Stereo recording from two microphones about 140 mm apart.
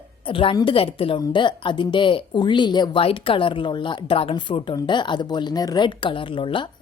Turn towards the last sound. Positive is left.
turn(degrees=35)  # may be behind; listen again after turning